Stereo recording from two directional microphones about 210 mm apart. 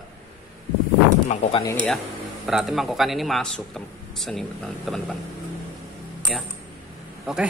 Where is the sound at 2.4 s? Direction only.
Centre (ahead or behind).